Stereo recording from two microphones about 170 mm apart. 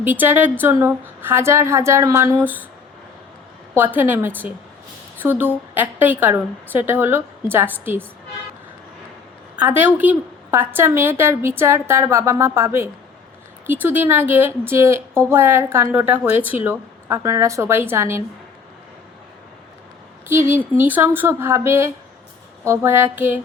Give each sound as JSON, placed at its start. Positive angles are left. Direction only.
{"t": 0.0, "sound": "a woman's voice", "side_deg": -10}
{"t": 3.8, "sound": "a woman's voice", "side_deg": -10}
{"t": 9.6, "sound": "a woman's voice", "side_deg": -10}
{"t": 20.2, "sound": "a woman's voice", "side_deg": -15}